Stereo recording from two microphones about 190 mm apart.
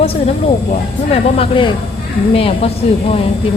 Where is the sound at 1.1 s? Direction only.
30° left (ahead or behind).